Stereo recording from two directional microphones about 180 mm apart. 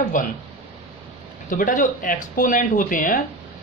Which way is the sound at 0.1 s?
50° left (ahead or behind).